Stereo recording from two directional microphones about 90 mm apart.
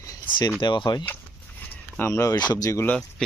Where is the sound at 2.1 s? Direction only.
35° left (ahead or behind).